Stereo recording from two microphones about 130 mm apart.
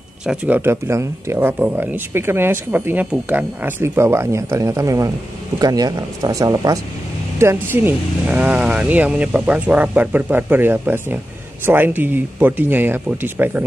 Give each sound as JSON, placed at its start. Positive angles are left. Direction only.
{"t": 0.2, "sound": "speech", "side_deg": -10}